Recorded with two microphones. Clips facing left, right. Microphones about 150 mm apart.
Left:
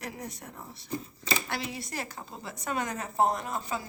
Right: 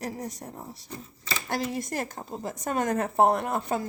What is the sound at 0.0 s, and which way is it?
Speech, 40° right (ahead or behind).